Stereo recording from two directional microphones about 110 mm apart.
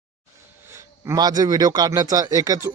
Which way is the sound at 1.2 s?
35° right (ahead or behind).